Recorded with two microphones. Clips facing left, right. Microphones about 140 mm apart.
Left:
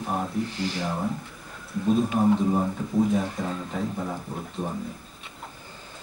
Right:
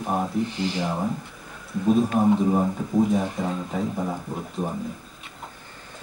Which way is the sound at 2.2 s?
10° right (ahead or behind).